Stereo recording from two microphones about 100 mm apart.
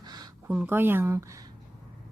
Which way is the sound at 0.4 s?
15° right (ahead or behind).